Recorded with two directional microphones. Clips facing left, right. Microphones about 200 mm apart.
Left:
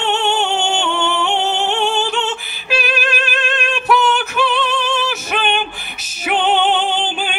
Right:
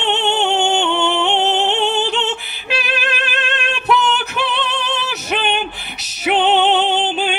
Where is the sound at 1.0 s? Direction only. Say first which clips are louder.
Right 2 dB; 20° right (ahead or behind).